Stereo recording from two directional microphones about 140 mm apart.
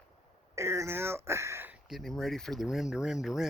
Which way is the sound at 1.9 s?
Centre (ahead or behind).